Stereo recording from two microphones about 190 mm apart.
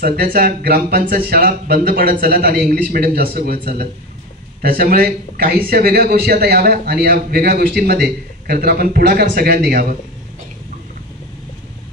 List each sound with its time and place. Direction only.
0.0 s speech: 50° right (ahead or behind)